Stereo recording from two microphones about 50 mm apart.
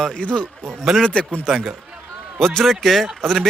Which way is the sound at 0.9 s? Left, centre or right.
Centre.